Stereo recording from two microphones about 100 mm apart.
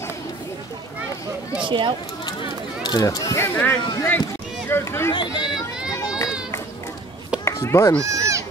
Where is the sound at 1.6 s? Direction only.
55° right (ahead or behind).